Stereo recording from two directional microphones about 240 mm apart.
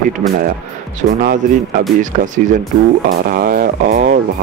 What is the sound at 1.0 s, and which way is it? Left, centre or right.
Speech, right.